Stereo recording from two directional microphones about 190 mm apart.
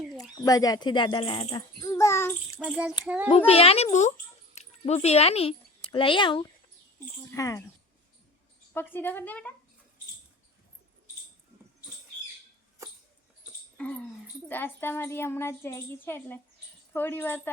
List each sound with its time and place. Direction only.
0.2 s speech: 20° left (ahead or behind)
2.6 s child singing: 5° right (ahead or behind)
3.2 s a child's voice: 30° left (ahead or behind); by 7.6 s 15° left (ahead or behind)
8.7 s a child's voice: 10° left (ahead or behind)
14.4 s a child's voice: 10° left (ahead or behind)